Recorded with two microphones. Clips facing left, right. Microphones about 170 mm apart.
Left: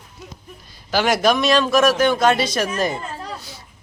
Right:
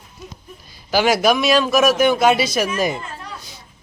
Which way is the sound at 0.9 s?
5° right (ahead or behind).